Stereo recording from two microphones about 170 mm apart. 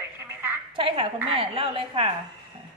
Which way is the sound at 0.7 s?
30° right (ahead or behind).